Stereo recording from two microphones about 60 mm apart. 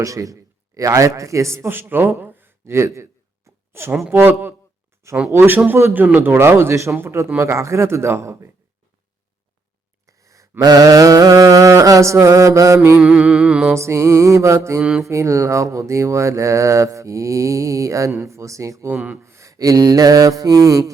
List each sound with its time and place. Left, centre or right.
0.0 s speech: right
2.2 s a sound: right
4.1 s speech: right
5.0 s speech: right
5.4 s speech: right
10.1 s sigh: right
10.7 s speech: right
13.0 s music: centre
13.7 s speech: right
14.8 s music: centre
15.0 s speech: right
19.2 s mantra: right